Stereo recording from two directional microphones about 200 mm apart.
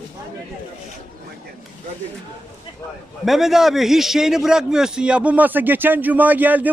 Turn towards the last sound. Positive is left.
turn(degrees=-10)  # may be behind; listen again after turning